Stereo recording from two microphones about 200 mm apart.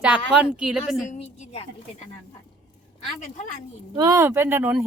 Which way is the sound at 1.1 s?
40° left (ahead or behind).